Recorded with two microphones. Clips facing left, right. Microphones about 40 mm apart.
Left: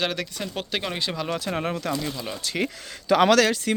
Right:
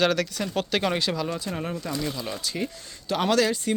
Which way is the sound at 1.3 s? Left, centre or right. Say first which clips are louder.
Left 4 dB; left.